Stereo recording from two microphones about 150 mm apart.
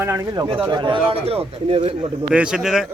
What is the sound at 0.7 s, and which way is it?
A man's voice, 30° right (ahead or behind).